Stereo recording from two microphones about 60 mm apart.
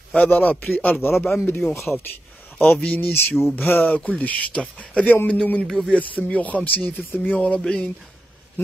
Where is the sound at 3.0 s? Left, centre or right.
Left.